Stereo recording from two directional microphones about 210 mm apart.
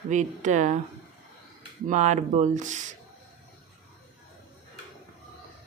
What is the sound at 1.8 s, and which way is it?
Speech, 35° right (ahead or behind).